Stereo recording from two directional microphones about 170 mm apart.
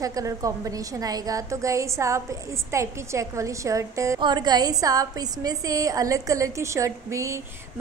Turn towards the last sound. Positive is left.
turn(degrees=-15)  # may be behind; listen again after turning